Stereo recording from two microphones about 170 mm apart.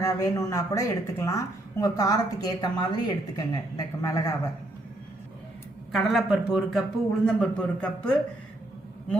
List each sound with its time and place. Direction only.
0.0 s speech: 20° left (ahead or behind)
5.9 s a man's voice: centre (ahead or behind)